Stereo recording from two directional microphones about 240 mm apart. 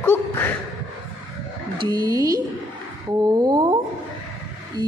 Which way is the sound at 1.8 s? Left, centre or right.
Centre.